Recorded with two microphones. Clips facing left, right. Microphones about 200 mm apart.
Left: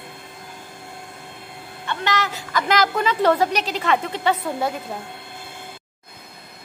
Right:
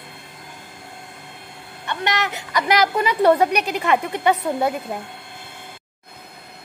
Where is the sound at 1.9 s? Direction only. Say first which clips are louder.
Even; 20° right (ahead or behind).